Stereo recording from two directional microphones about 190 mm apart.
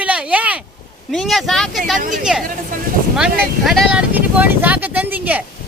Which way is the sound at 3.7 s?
Centre (ahead or behind).